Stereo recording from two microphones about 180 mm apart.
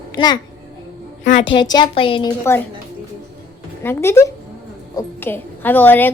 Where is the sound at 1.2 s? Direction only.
45° left (ahead or behind).